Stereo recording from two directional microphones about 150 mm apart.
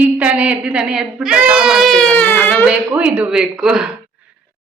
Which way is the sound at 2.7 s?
10° right (ahead or behind).